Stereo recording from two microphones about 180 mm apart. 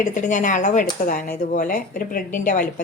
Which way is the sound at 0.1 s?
45° left (ahead or behind).